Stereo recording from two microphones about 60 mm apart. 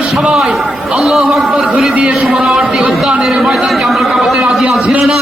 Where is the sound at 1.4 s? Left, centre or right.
Centre.